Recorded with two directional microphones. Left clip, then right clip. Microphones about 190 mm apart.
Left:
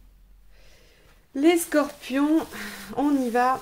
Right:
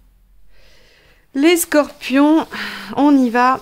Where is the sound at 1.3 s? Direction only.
35° right (ahead or behind).